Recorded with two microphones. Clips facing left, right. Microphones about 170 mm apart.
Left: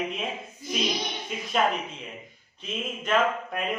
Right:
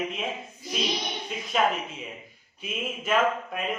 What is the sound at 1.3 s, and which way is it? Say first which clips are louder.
Speech: even; centre (ahead or behind).